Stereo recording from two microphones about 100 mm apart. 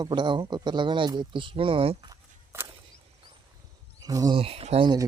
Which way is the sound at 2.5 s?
25° right (ahead or behind).